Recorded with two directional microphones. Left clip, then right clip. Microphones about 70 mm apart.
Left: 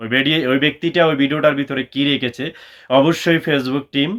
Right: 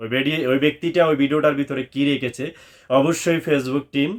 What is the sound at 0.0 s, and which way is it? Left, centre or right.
Speech, right.